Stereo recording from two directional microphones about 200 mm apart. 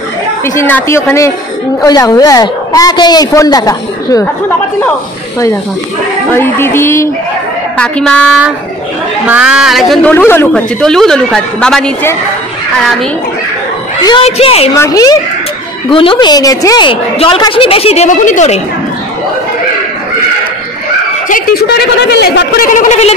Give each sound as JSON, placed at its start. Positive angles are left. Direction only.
{"t": 0.6, "sound": "a woman's voice", "side_deg": 10}
{"t": 6.3, "sound": "a woman's voice", "side_deg": 10}
{"t": 9.3, "sound": "speech", "side_deg": -5}
{"t": 10.1, "sound": "speech", "side_deg": 10}
{"t": 14.0, "sound": "a woman's voice", "side_deg": 25}
{"t": 14.7, "sound": "a woman's voice", "side_deg": 20}
{"t": 21.3, "sound": "a woman's voice", "side_deg": 50}
{"t": 22.7, "sound": "a sound", "side_deg": 35}